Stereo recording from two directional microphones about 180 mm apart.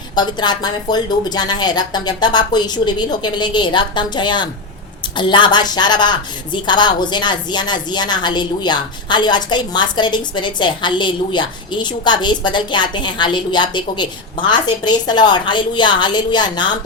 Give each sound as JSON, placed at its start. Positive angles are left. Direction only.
{"t": 0.2, "sound": "a woman's voice", "side_deg": 25}